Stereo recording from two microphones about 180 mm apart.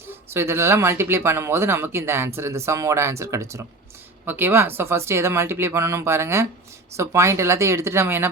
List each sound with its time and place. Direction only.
0.1 s speech: 15° right (ahead or behind)